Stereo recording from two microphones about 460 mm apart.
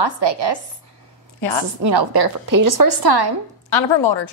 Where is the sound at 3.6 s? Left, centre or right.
Left.